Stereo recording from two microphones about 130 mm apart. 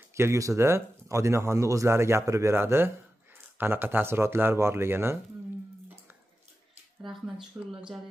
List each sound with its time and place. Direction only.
0.1 s speech: 20° right (ahead or behind)
7.0 s a sound: centre (ahead or behind)
7.5 s speech: 15° right (ahead or behind)